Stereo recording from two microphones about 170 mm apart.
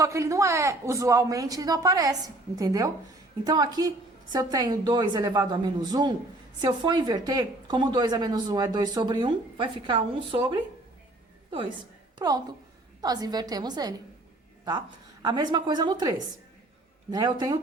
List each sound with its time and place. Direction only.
0.0 s speech: 15° right (ahead or behind)
12.2 s speech: 20° right (ahead or behind)
15.2 s speech: 25° right (ahead or behind)